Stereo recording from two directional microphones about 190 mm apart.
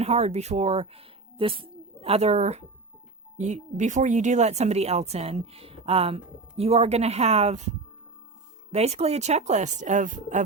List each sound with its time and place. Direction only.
0.0 s speech: 35° right (ahead or behind)
8.7 s speech: 35° right (ahead or behind)